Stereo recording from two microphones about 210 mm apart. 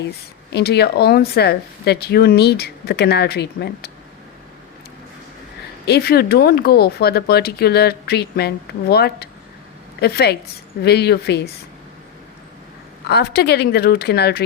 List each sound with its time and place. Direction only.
0.5 s speech: 50° left (ahead or behind)
5.8 s speech: 50° left (ahead or behind)
13.1 s speech: 50° left (ahead or behind)